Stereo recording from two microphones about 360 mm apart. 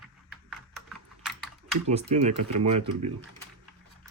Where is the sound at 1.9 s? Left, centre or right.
Centre.